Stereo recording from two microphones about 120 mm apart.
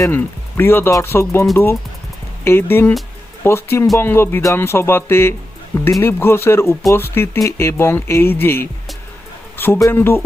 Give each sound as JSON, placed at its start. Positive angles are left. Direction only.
{"t": 0.0, "sound": "speech", "side_deg": 20}